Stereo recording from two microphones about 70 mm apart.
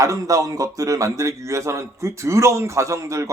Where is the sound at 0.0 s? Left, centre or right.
Right.